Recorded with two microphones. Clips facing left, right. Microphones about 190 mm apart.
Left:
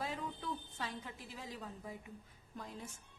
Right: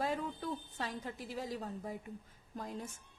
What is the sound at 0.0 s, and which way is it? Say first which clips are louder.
A woman's voice: right 5 dB; 45° right (ahead or behind).